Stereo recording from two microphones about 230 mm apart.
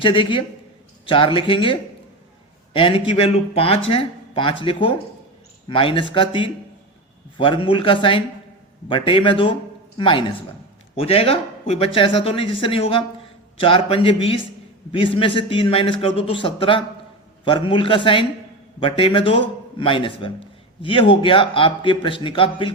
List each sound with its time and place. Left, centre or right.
0.0 s a man's voice: left